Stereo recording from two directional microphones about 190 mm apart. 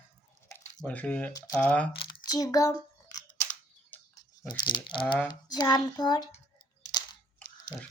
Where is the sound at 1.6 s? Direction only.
5° left (ahead or behind).